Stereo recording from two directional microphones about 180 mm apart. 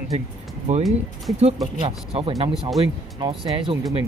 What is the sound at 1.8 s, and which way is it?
Speech, 30° right (ahead or behind).